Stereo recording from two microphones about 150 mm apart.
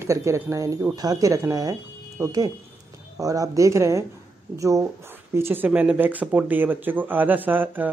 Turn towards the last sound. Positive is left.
turn(degrees=-10)  # may be behind; listen again after turning